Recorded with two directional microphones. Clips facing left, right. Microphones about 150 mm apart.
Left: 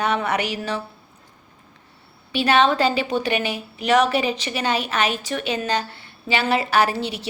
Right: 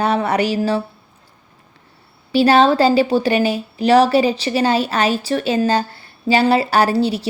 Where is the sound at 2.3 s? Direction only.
35° right (ahead or behind).